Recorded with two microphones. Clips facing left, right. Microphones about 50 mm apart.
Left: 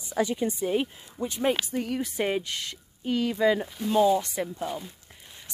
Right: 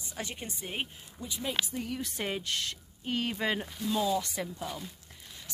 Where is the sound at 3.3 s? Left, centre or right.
Right.